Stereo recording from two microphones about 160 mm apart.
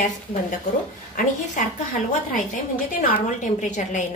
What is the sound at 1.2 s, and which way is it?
Speech, 50° left (ahead or behind).